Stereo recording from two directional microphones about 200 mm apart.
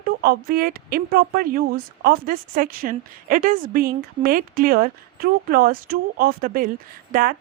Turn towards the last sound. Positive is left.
turn(degrees=-45)  # may be behind; listen again after turning